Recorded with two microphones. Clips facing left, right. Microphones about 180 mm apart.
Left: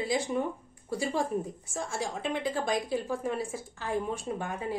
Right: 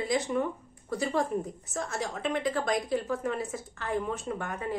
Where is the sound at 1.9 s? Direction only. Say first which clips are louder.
Left 1 dB; 30° left (ahead or behind).